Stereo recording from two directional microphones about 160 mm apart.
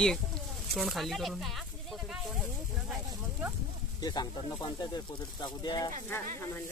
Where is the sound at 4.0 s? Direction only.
25° left (ahead or behind).